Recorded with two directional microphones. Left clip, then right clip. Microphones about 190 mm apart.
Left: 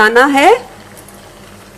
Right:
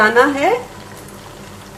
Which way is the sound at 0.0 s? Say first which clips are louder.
Left 4 dB; 40° left (ahead or behind).